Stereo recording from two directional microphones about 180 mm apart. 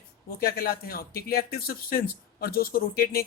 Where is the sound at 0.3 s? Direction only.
55° left (ahead or behind).